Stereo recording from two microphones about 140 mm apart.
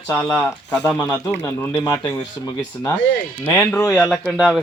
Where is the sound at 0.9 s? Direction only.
25° left (ahead or behind).